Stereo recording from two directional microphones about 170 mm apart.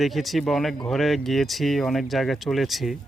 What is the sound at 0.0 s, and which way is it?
Speech, centre (ahead or behind).